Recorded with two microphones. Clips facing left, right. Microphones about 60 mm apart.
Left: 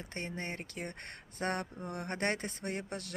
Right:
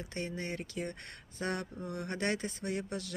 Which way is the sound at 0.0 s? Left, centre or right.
Left.